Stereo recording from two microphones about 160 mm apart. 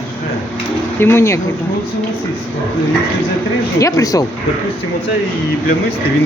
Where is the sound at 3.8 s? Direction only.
20° left (ahead or behind).